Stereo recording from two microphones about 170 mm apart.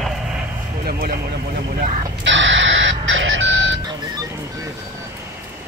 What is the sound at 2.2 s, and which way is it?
Alarm clock, 90° right.